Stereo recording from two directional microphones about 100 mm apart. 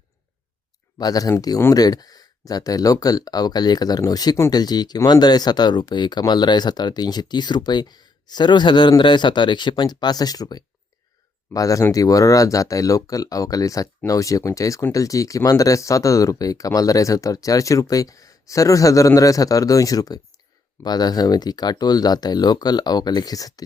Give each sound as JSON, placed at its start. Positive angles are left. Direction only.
{"t": 0.9, "sound": "speech", "side_deg": 40}